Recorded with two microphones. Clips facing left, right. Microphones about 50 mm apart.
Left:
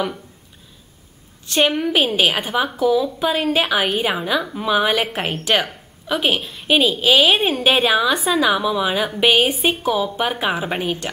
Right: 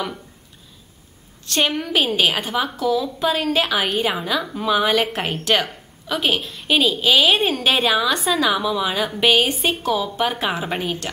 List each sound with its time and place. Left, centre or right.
1.4 s a woman's voice: centre